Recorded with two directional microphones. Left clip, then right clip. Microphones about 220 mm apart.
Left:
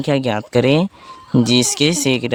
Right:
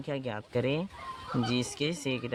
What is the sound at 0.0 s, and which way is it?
Speech, 55° left (ahead or behind).